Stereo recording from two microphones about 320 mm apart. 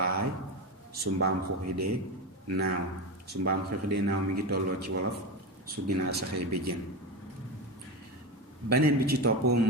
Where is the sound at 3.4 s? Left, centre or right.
Right.